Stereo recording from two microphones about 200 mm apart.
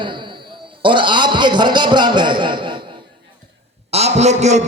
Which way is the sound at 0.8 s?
25° right (ahead or behind).